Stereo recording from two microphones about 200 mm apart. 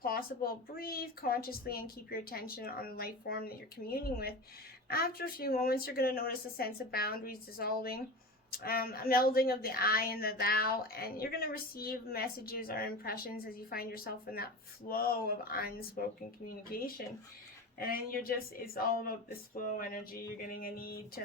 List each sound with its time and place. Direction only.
0.0 s a woman's voice: 45° left (ahead or behind)